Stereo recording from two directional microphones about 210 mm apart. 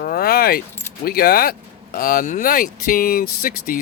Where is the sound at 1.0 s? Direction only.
45° left (ahead or behind).